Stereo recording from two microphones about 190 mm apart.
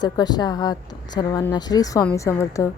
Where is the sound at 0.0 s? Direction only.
20° left (ahead or behind).